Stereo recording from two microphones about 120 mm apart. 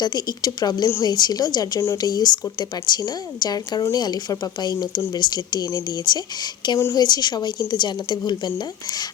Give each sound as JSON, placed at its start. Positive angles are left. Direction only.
{"t": 0.0, "sound": "a woman's voice", "side_deg": 35}